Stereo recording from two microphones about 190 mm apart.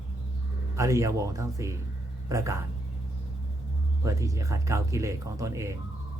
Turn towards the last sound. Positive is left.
turn(degrees=-15)  # may be behind; listen again after turning